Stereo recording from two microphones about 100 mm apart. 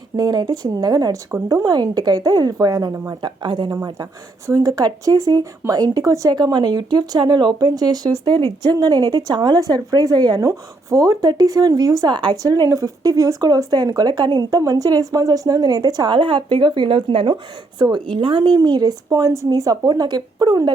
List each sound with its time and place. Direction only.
0.2 s speech: 40° right (ahead or behind)
2.9 s speech: 25° right (ahead or behind)
3.2 s speech: 50° right (ahead or behind)
4.4 s speech: 35° right (ahead or behind)
10.5 s speech: 30° right (ahead or behind); by 17.3 s 60° right (ahead or behind)
17.7 s speech: 50° right (ahead or behind)